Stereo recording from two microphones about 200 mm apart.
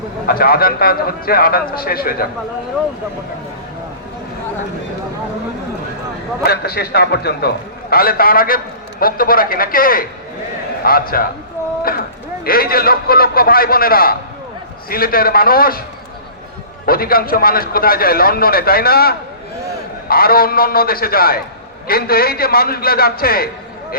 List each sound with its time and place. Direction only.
0.3 s a man's voice: 50° left (ahead or behind)
6.4 s a man's voice: 50° left (ahead or behind)
11.8 s a sound: 50° left (ahead or behind)
12.5 s a man's voice: 50° left (ahead or behind)
16.8 s a man's voice: 50° left (ahead or behind)